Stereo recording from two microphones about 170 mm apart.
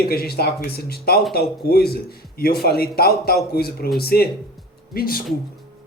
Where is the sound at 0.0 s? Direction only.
65° left (ahead or behind).